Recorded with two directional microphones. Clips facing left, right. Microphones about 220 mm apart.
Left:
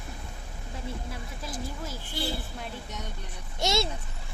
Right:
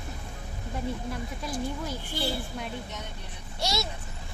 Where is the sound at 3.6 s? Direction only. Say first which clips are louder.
Left 4 dB; 25° left (ahead or behind).